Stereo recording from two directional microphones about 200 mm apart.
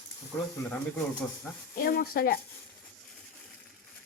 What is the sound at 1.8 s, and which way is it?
Speech, 50° left (ahead or behind).